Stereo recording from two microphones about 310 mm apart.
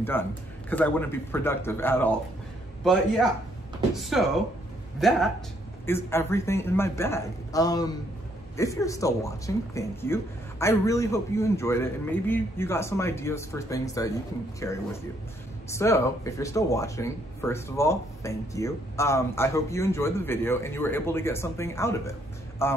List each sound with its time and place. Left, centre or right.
0.0 s a man's voice: centre